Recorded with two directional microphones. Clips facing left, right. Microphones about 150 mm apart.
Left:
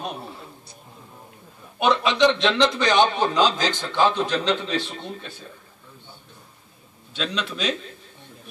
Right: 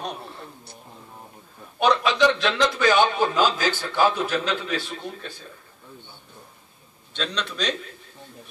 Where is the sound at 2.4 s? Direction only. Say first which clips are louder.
Left 2 dB; 25° left (ahead or behind).